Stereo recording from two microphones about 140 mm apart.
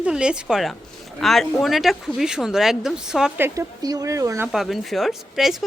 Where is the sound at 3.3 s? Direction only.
20° right (ahead or behind).